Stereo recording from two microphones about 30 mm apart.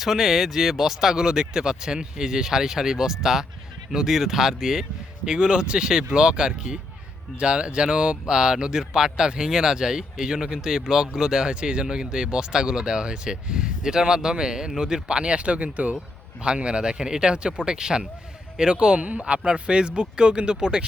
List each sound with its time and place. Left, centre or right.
0.0 s speech: centre; by 16.0 s right
16.6 s speech: right